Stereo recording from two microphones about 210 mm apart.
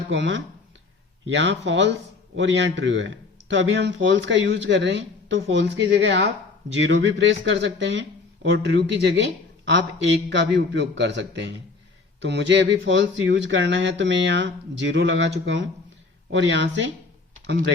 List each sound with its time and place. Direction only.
0.1 s speech: 60° right (ahead or behind)
10.2 s speech: 55° right (ahead or behind)